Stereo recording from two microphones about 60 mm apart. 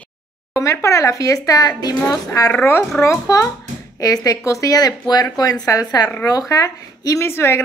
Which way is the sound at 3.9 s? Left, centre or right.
Left.